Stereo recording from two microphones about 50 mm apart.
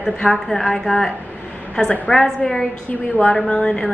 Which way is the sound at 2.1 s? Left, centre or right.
Left.